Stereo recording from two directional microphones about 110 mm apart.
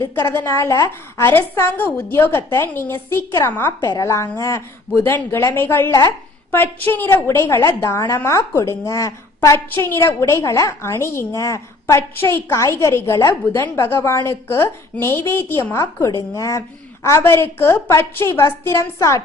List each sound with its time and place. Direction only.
0.3 s a woman's voice: 25° left (ahead or behind)
3.7 s a woman's voice: 30° left (ahead or behind)
5.9 s speech: 35° left (ahead or behind)
6.5 s a woman's voice: 20° left (ahead or behind)